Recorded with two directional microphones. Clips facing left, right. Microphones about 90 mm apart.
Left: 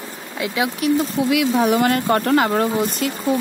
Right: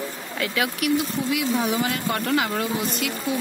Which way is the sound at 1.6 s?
55° left (ahead or behind).